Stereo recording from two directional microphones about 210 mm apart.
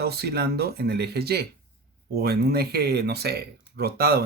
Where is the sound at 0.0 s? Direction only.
50° right (ahead or behind).